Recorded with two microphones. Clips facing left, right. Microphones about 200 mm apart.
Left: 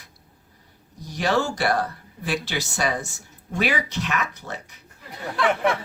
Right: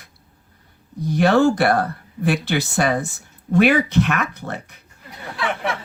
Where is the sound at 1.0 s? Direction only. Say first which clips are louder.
Right 8 dB; 55° right (ahead or behind).